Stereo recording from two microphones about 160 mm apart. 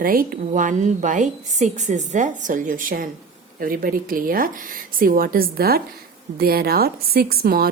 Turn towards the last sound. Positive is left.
turn(degrees=-70)  # may be behind; listen again after turning